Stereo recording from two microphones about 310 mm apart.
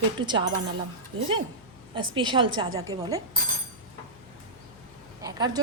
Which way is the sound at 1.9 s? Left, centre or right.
Centre.